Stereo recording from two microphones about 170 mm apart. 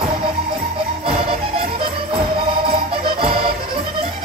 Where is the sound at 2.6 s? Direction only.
35° right (ahead or behind).